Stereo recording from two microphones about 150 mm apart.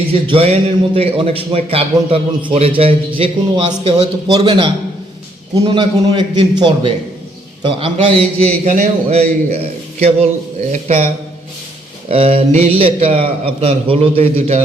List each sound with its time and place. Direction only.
0.1 s a man's voice: 40° right (ahead or behind)
12.0 s a man's voice: 40° right (ahead or behind)